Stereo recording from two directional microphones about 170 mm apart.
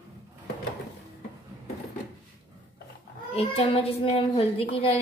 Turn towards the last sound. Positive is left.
turn(degrees=35)  # may be behind; listen again after turning